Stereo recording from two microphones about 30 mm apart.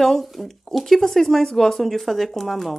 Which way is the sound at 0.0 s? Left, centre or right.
Centre.